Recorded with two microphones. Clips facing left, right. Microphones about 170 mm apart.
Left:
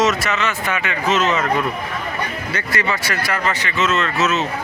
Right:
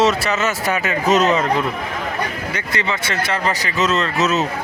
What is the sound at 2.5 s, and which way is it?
Speech, 20° right (ahead or behind).